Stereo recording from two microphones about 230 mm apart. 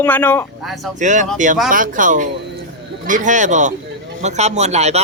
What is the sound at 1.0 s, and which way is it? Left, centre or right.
A man's voice, right.